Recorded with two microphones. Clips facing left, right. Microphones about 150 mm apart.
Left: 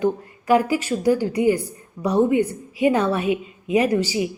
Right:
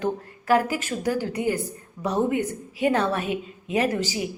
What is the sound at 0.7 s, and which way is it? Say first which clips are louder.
Speech: left 6 dB; 50° right (ahead or behind).